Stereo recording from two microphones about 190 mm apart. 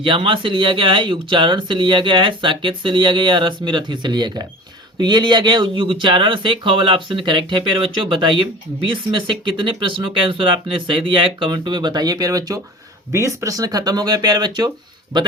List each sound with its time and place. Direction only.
0.0 s speech: 25° right (ahead or behind)